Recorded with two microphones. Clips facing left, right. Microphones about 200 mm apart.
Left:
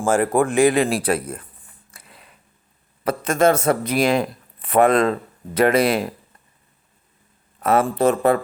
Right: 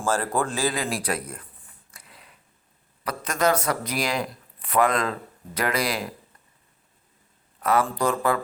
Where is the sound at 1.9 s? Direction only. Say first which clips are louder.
Left 3 dB; 25° left (ahead or behind).